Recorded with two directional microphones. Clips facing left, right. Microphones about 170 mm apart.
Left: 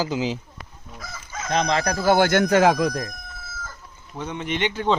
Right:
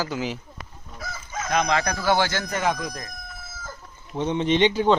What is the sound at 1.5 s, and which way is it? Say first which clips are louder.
Speech: left 1 dB; 30° left (ahead or behind).